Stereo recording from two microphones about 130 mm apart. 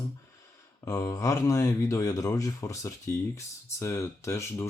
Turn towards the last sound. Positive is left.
turn(degrees=20)  # may be behind; listen again after turning